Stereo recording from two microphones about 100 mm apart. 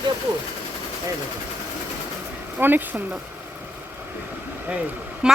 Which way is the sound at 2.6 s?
20° right (ahead or behind).